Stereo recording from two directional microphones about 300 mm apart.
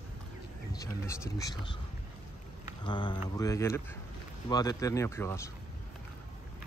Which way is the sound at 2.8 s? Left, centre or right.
Centre.